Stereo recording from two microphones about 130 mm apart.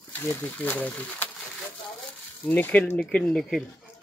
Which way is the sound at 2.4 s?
15° left (ahead or behind).